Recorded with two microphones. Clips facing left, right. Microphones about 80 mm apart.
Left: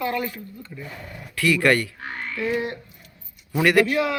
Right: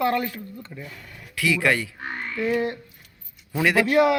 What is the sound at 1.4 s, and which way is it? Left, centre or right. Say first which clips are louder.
Speech: left 3 dB; centre.